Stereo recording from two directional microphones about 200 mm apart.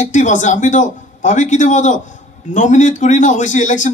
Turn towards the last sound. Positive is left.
turn(degrees=40)  # may be behind; listen again after turning